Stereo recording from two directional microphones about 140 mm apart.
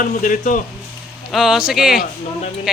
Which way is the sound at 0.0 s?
70° left (ahead or behind).